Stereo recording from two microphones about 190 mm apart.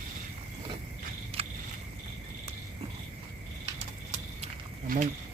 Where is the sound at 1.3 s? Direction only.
30° right (ahead or behind).